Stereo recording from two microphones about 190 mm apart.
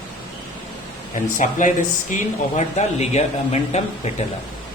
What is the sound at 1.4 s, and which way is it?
Speech, 40° left (ahead or behind).